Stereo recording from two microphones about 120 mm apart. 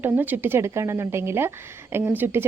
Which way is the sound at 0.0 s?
15° right (ahead or behind).